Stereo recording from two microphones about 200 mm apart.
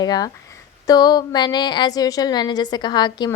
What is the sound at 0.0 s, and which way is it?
A woman's voice, 20° left (ahead or behind).